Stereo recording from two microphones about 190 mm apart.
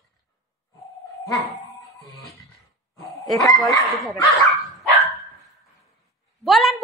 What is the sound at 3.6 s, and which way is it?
Speech, centre (ahead or behind).